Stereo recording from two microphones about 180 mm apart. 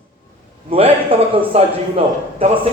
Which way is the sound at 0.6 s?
30° right (ahead or behind).